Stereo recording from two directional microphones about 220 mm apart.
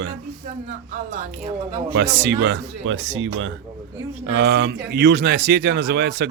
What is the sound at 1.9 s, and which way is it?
Speech, 50° right (ahead or behind).